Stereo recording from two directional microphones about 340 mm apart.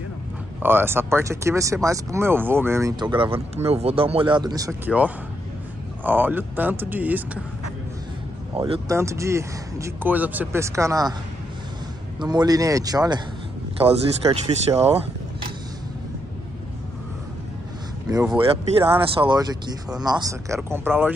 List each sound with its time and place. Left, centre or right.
0.6 s speech: centre
8.5 s speech: centre
12.2 s speech: centre
14.2 s speech: centre
18.1 s speech: centre